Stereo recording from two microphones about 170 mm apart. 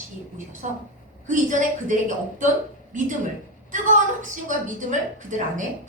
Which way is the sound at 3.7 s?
50° right (ahead or behind).